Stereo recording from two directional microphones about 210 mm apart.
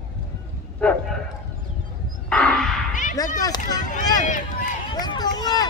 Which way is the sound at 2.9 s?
35° left (ahead or behind).